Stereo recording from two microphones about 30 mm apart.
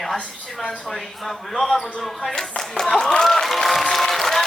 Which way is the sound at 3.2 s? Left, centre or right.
Centre.